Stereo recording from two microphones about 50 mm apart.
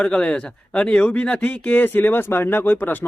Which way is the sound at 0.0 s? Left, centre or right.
Left.